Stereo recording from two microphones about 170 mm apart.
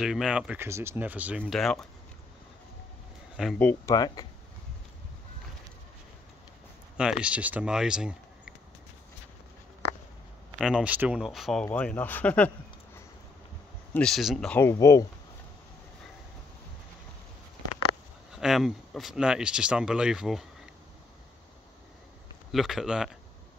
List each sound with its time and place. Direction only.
0.0 s speech: 5° right (ahead or behind)
3.5 s speech: 10° left (ahead or behind)
3.9 s speech: 20° left (ahead or behind)
7.0 s speech: 5° right (ahead or behind)
10.6 s speech: 5° right (ahead or behind)
11.6 s speech: 10° left (ahead or behind)
14.6 s speech: 15° left (ahead or behind)
18.3 s speech: centre (ahead or behind)
22.5 s speech: centre (ahead or behind)